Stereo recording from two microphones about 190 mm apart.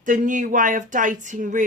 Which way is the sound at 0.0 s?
45° right (ahead or behind).